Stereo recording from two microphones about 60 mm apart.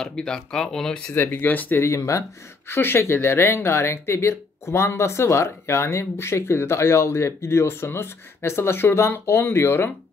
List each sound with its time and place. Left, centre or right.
0.0 s speech: centre
1.1 s speech: left
1.8 s speech: left
2.7 s speech: left